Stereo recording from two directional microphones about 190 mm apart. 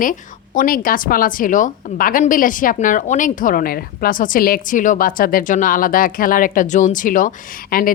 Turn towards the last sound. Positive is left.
turn(degrees=50)  # may be behind; listen again after turning